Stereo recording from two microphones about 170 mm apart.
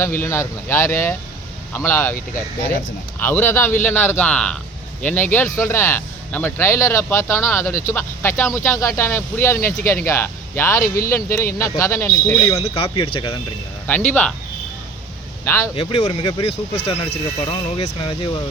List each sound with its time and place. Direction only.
0.0 s speech: 15° left (ahead or behind)
3.2 s speech: 10° left (ahead or behind)
12.5 s speech: 35° left (ahead or behind)
14.1 s speech: 5° left (ahead or behind)
15.4 s speech: 15° left (ahead or behind)
15.7 s speech: 30° left (ahead or behind)